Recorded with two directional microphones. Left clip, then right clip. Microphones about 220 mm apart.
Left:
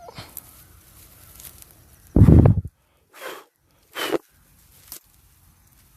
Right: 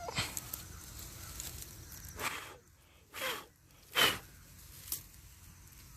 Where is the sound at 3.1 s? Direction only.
30° left (ahead or behind).